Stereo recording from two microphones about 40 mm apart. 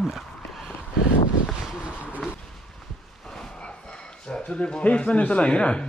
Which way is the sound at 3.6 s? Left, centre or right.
Left.